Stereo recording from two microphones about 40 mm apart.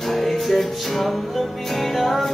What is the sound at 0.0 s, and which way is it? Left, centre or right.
Music, centre.